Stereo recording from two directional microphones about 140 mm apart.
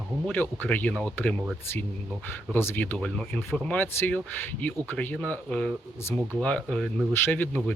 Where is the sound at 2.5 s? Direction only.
15° left (ahead or behind).